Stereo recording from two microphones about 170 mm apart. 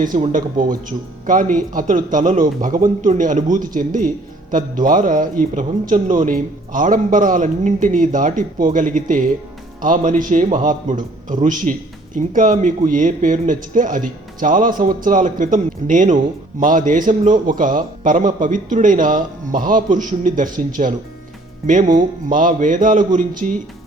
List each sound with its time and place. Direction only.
0.2 s a man's voice: 50° right (ahead or behind)
21.9 s a man's voice: 50° right (ahead or behind)